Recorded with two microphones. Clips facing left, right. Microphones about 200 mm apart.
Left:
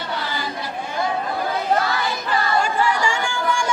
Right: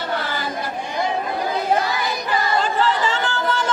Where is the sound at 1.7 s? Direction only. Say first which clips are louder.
Even; 15° right (ahead or behind).